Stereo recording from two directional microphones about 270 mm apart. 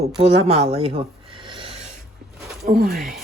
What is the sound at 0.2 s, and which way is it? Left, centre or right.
Speech, right.